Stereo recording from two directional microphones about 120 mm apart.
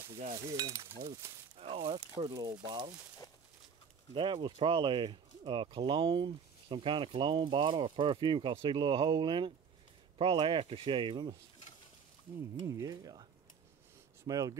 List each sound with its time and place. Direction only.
0.3 s speech: 30° right (ahead or behind)
1.6 s speech: 55° right (ahead or behind)
2.0 s speech: 35° right (ahead or behind)
4.1 s speech: 45° right (ahead or behind)
12.6 s speech: 30° right (ahead or behind)